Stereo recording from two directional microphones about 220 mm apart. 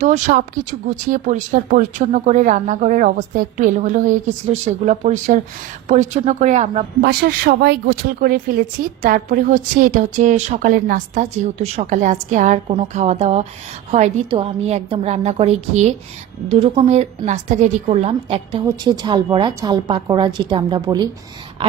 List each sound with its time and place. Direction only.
0.0 s a woman's voice: 35° right (ahead or behind)
7.0 s a woman's voice: 45° right (ahead or behind); by 21.1 s 20° right (ahead or behind)